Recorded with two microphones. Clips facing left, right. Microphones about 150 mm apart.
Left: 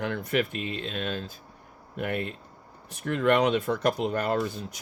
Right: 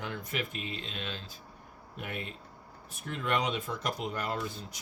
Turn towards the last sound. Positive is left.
turn(degrees=60)  # may be behind; listen again after turning